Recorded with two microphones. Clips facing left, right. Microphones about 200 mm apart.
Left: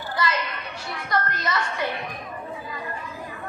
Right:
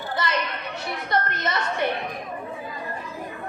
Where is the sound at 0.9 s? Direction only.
25° right (ahead or behind).